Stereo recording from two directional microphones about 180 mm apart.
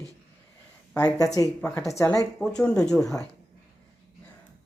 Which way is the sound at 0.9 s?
20° left (ahead or behind).